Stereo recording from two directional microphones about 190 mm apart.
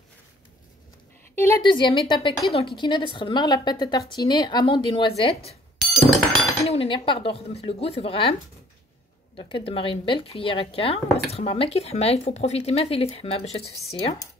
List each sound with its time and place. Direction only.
1.3 s speech: 15° left (ahead or behind)
1.6 s a woman's voice: 25° left (ahead or behind)
6.6 s speech: 30° left (ahead or behind)
9.4 s speech: 30° left (ahead or behind)